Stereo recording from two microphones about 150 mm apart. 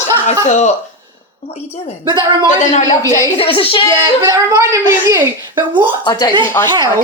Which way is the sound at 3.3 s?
40° left (ahead or behind).